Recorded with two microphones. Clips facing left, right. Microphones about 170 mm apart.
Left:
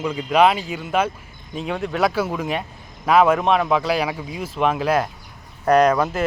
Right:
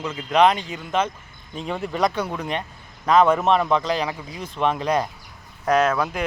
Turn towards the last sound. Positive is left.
turn(degrees=5)  # may be behind; listen again after turning